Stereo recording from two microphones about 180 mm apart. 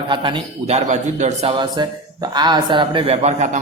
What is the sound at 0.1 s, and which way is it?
Speech, 25° right (ahead or behind).